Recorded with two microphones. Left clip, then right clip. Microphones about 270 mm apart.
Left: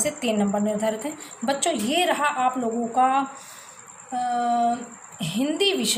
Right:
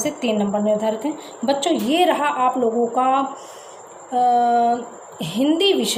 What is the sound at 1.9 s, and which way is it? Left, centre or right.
Speech, left.